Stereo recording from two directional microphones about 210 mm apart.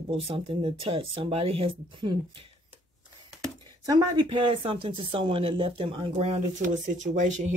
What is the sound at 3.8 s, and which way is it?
Speech, 20° right (ahead or behind).